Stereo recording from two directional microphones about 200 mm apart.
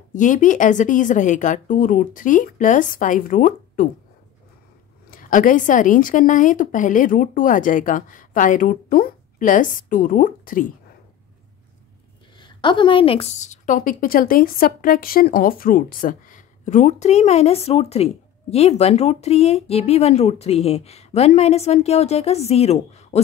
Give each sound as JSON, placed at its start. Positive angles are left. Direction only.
{"t": 0.1, "sound": "a woman's voice", "side_deg": 40}
{"t": 5.1, "sound": "a woman's voice", "side_deg": 40}
{"t": 12.4, "sound": "a woman's voice", "side_deg": 25}